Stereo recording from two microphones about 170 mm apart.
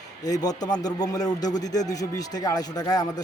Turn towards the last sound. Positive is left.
turn(degrees=20)  # may be behind; listen again after turning